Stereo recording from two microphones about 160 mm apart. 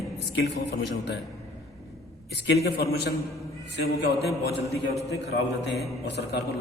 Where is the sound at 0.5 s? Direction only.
90° left.